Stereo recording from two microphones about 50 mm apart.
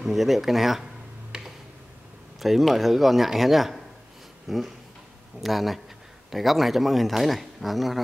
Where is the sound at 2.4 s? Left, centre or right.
Centre.